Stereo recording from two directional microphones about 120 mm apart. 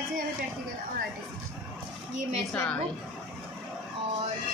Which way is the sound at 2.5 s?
10° left (ahead or behind).